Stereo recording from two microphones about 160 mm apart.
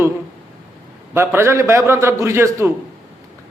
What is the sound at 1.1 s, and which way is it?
A man's voice, 15° right (ahead or behind).